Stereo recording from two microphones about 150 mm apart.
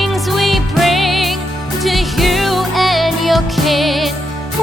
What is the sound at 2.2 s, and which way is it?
Music, centre (ahead or behind).